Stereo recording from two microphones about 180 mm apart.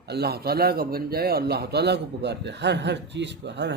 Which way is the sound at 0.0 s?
65° right (ahead or behind).